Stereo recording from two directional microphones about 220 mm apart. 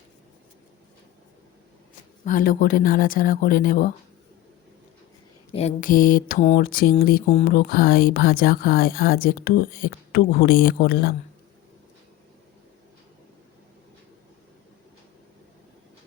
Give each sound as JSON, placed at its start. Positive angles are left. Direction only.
{"t": 2.2, "sound": "mantra", "side_deg": 40}
{"t": 5.5, "sound": "mantra", "side_deg": 30}
{"t": 7.3, "sound": "speech", "side_deg": 30}
{"t": 7.5, "sound": "speech", "side_deg": 45}